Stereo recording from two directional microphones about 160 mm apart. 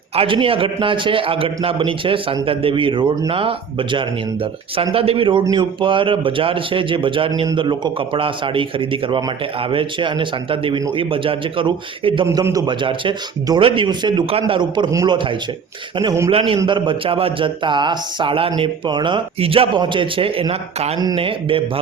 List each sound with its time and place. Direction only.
0.2 s a man's voice: 35° right (ahead or behind)